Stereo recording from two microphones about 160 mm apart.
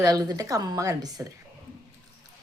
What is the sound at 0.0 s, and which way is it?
A woman's voice, 25° right (ahead or behind).